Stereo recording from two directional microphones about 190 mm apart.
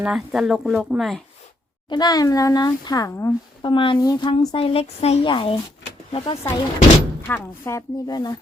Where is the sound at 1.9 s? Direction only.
20° left (ahead or behind).